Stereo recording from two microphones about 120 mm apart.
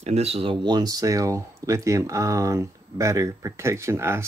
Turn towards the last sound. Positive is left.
turn(degrees=-20)  # may be behind; listen again after turning